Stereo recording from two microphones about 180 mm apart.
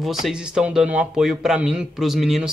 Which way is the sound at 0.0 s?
Centre (ahead or behind).